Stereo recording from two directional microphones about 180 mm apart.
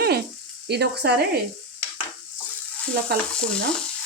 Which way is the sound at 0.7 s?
65° right (ahead or behind).